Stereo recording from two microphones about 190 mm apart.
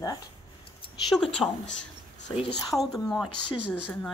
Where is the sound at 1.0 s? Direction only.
5° left (ahead or behind).